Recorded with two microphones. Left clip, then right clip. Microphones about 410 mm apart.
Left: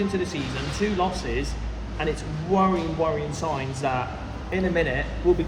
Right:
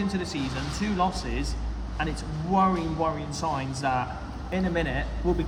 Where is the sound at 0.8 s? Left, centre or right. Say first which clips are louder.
Left 2 dB; centre.